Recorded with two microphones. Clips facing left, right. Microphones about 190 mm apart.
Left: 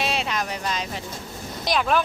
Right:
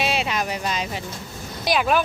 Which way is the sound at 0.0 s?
5° right (ahead or behind).